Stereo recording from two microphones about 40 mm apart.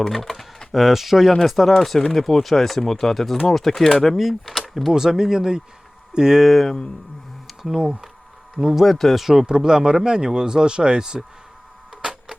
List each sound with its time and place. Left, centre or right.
0.0 s speech: centre
4.9 s speech: centre
6.5 s speech: centre
7.4 s a sound: centre
8.5 s speech: centre
9.6 s speech: centre
12.0 s music: right